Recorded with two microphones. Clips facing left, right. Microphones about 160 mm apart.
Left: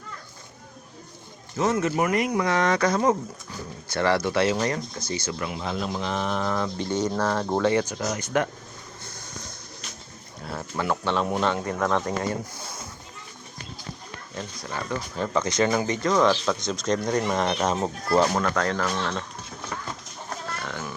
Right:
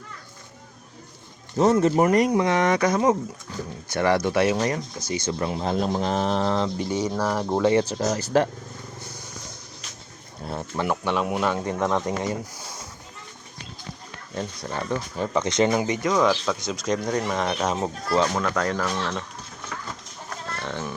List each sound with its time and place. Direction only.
1.5 s speech: 35° right (ahead or behind)
2.4 s speech: 20° right (ahead or behind)
6.7 s speech: 10° right (ahead or behind)
7.6 s speech: 25° right (ahead or behind)
10.4 s speech: 20° right (ahead or behind)
11.6 s speech: 20° right (ahead or behind)
14.3 s speech: 30° right (ahead or behind)
15.2 s speech: 15° right (ahead or behind); by 18.5 s 5° left (ahead or behind)
18.5 s speech: 20° right (ahead or behind)
18.8 s speech: 5° right (ahead or behind)
20.6 s a sound: 25° right (ahead or behind)